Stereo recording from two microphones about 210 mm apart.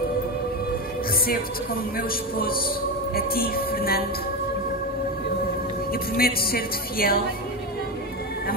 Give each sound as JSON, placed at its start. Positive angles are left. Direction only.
{"t": 2.0, "sound": "music", "side_deg": 45}
{"t": 6.1, "sound": "music", "side_deg": 45}